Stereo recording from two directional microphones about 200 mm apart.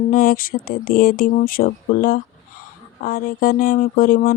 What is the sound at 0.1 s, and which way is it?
Speech, 45° left (ahead or behind).